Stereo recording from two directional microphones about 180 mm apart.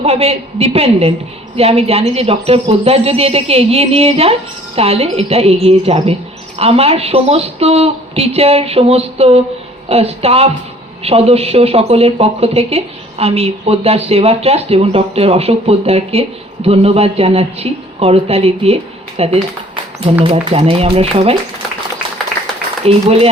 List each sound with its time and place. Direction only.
0.0 s speech: 35° right (ahead or behind)
22.9 s speech: 35° right (ahead or behind)